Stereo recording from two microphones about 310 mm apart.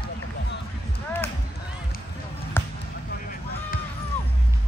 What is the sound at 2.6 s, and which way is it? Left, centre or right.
Basketball bounce, centre.